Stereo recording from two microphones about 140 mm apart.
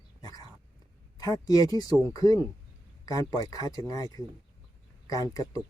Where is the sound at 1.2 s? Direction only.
25° left (ahead or behind).